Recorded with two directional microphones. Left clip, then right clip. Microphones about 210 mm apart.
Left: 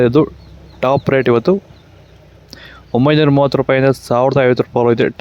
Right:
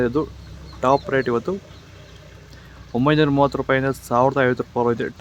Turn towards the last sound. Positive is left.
turn(degrees=40)  # may be behind; listen again after turning